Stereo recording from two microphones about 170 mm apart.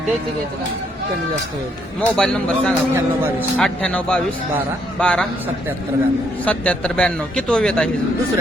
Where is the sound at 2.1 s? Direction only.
5° left (ahead or behind).